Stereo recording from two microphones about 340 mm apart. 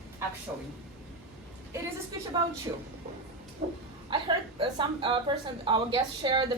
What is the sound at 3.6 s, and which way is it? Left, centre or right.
A woman's voice, centre.